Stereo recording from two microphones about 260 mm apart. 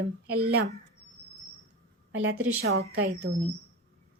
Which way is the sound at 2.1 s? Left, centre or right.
Right.